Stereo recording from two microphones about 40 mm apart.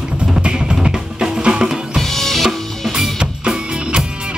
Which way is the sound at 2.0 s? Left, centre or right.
Centre.